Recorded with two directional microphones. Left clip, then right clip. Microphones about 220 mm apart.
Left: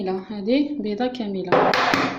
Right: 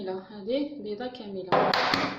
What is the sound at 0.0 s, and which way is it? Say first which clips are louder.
A woman's voice: left 8 dB; 30° left (ahead or behind).